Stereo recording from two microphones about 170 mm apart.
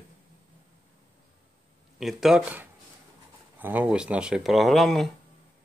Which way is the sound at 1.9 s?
Centre (ahead or behind).